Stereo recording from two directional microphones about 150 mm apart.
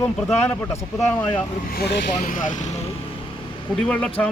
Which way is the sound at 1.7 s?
90° left.